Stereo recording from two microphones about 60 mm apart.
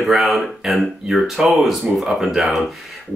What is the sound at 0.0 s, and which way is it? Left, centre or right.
Speech, centre.